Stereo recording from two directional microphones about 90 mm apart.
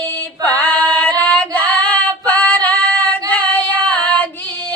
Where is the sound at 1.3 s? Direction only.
15° left (ahead or behind).